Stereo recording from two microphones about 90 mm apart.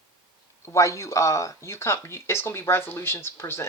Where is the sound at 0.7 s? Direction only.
35° left (ahead or behind).